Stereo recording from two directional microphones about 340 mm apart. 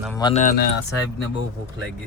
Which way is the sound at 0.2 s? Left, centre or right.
Centre.